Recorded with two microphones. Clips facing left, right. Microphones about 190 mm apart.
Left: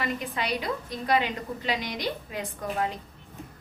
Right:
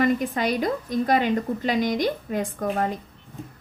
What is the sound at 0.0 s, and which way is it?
A woman's voice, 45° right (ahead or behind).